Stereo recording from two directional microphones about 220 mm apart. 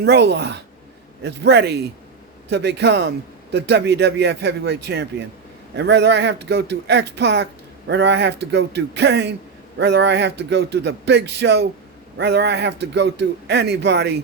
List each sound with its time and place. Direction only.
0.0 s a man's voice: 50° right (ahead or behind)